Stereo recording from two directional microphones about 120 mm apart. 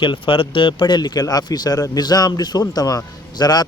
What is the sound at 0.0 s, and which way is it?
Speech, 45° left (ahead or behind).